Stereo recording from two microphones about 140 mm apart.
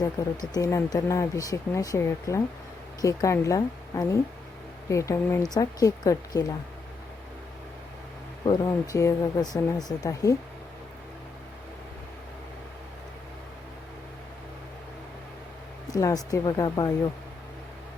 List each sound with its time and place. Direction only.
0.0 s speech: 25° left (ahead or behind)
8.4 s speech: 30° left (ahead or behind)
15.9 s speech: 25° left (ahead or behind)